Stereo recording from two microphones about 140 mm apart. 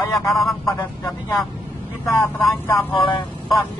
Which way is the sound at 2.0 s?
15° left (ahead or behind).